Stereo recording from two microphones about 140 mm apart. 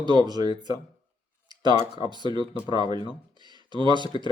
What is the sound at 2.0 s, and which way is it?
Speech, 30° right (ahead or behind).